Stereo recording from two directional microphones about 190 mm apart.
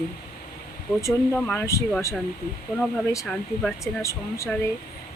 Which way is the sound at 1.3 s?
10° left (ahead or behind).